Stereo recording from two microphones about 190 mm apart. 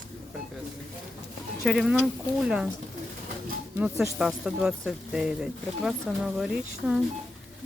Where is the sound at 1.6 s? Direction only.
Centre (ahead or behind).